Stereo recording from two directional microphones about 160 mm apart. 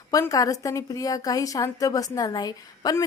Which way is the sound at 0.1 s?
20° left (ahead or behind).